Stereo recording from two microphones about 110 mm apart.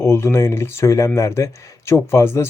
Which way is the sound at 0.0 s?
25° left (ahead or behind).